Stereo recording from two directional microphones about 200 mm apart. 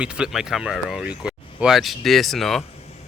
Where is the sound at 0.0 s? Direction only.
5° right (ahead or behind).